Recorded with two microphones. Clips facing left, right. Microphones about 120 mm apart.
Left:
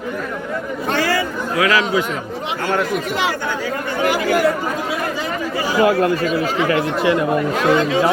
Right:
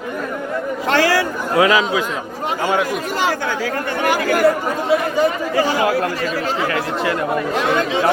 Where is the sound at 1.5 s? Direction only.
25° right (ahead or behind).